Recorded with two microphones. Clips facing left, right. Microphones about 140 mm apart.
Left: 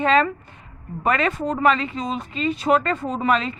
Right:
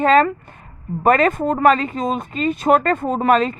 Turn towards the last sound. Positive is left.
turn(degrees=-45)  # may be behind; listen again after turning